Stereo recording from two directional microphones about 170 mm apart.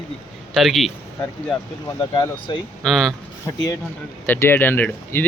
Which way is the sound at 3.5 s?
20° left (ahead or behind).